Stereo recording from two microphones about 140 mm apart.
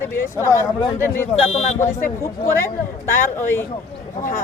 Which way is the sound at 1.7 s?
20° left (ahead or behind).